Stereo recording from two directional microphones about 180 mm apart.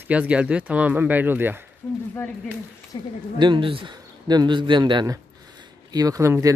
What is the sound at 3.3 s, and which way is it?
A man's voice, 25° right (ahead or behind).